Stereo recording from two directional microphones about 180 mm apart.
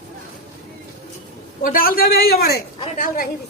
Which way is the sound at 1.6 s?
50° left (ahead or behind).